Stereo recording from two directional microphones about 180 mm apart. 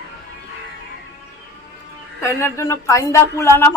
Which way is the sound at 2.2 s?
15° left (ahead or behind).